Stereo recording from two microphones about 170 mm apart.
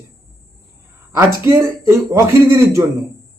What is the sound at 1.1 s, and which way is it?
A man's voice, 15° right (ahead or behind).